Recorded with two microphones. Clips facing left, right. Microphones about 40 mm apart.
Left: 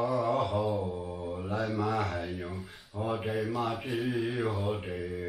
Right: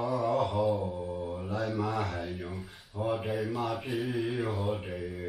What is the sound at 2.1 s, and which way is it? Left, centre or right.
Rub, centre.